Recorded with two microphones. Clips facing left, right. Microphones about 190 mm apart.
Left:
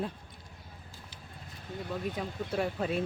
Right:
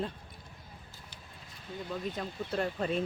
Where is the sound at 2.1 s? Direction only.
10° left (ahead or behind).